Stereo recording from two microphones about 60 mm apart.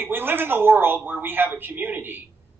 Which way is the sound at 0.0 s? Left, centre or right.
Right.